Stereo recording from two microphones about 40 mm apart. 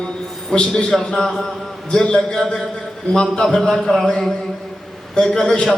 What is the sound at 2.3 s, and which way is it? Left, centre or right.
Speech, centre.